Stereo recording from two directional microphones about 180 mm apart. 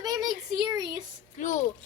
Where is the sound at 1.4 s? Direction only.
40° left (ahead or behind).